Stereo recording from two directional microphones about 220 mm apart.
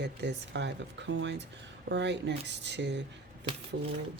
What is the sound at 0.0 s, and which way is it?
Speech, 50° right (ahead or behind).